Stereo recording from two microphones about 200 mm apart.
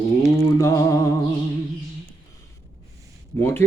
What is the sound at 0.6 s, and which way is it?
Music, 15° left (ahead or behind).